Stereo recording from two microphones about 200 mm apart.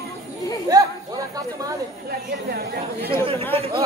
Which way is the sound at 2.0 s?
50° right (ahead or behind).